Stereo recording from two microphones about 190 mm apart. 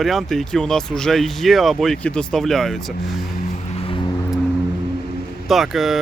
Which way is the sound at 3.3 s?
40° left (ahead or behind).